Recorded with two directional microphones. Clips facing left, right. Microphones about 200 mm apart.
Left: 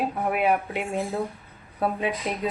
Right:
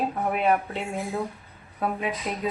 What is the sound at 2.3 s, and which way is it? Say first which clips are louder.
Speech: left 1 dB; 20° left (ahead or behind).